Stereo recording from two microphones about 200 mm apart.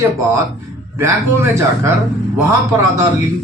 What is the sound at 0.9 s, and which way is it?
Speech, 15° right (ahead or behind).